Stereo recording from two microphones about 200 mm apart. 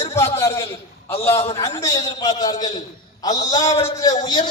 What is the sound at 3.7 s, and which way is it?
Music, 30° left (ahead or behind).